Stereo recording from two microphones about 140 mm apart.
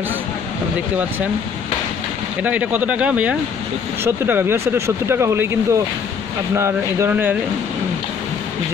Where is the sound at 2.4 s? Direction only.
10° right (ahead or behind).